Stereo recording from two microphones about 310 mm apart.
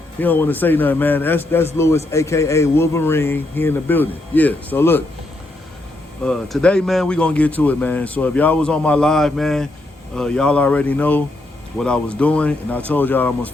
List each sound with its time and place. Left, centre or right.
0.2 s speech: centre
6.2 s speech: centre